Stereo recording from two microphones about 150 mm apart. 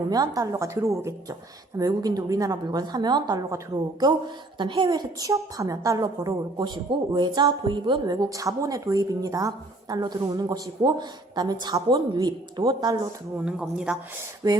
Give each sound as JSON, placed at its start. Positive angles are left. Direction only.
{"t": 0.1, "sound": "a woman's voice", "side_deg": -25}
{"t": 13.4, "sound": "speech", "side_deg": -5}
{"t": 14.4, "sound": "a woman's voice", "side_deg": -25}